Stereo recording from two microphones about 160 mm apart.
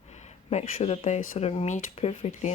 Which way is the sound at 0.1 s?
45° left (ahead or behind).